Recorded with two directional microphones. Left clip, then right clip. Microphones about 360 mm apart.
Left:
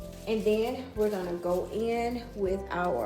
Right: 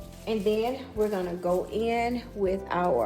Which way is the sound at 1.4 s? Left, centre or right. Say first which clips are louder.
Right 3 dB; right.